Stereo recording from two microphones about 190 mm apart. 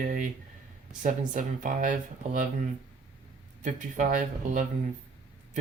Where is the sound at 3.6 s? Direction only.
40° right (ahead or behind).